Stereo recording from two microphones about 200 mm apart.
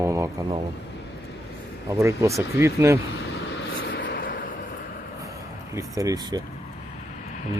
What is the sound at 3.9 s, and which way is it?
Vehicle, 55° left (ahead or behind).